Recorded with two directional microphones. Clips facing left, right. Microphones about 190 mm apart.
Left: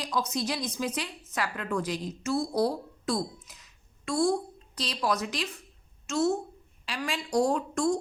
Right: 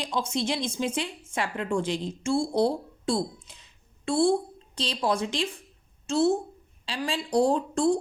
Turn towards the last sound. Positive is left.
turn(degrees=-30)  # may be behind; listen again after turning